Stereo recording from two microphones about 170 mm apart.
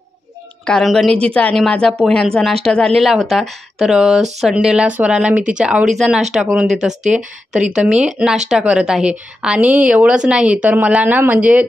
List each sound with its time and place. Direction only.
0.7 s a woman's voice: 5° left (ahead or behind)